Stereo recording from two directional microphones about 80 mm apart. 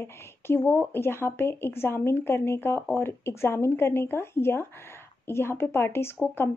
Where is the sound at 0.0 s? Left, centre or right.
Left.